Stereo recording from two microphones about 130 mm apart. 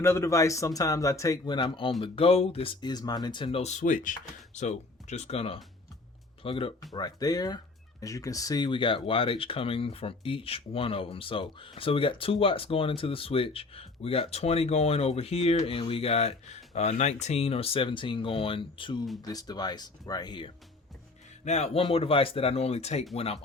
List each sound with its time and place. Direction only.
0.0 s speech: 20° left (ahead or behind); by 2.7 s 50° left (ahead or behind)
2.8 s speech: 30° left (ahead or behind); by 4.1 s 80° left
4.5 s speech: 60° left (ahead or behind); by 6.7 s 45° left (ahead or behind)
6.9 s speech: 30° left (ahead or behind)
19.2 s speech: 30° left (ahead or behind)
21.4 s speech: 60° left (ahead or behind)